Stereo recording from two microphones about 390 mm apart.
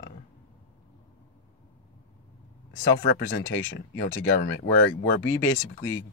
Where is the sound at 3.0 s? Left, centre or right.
Left.